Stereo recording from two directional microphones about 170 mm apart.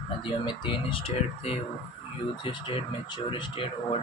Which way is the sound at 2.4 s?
30° left (ahead or behind).